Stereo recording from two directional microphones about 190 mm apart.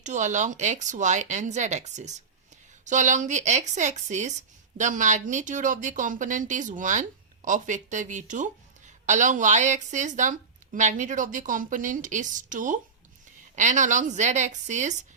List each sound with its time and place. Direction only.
0.0 s a woman's voice: 40° right (ahead or behind)